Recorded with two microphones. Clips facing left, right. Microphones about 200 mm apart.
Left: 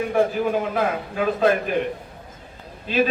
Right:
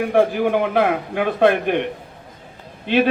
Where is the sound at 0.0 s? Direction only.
65° right (ahead or behind).